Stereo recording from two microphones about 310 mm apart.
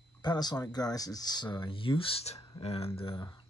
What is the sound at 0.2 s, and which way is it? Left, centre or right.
Speech, centre.